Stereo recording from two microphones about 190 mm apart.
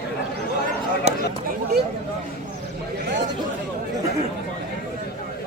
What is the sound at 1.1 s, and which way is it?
Chatter, 35° right (ahead or behind).